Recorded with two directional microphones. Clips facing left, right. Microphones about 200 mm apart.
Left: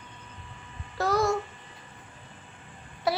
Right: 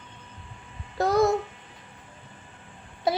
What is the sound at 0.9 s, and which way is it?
Babbling, 20° right (ahead or behind).